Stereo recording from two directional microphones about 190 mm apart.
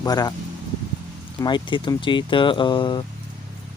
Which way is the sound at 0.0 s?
20° left (ahead or behind).